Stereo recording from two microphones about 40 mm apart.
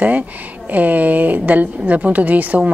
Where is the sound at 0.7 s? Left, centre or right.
Right.